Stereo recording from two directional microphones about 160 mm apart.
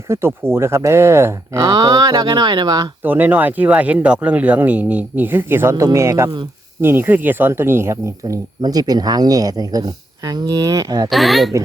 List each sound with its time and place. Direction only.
0.1 s speech: 15° right (ahead or behind)
3.0 s speech: 10° right (ahead or behind)
11.1 s speech: centre (ahead or behind)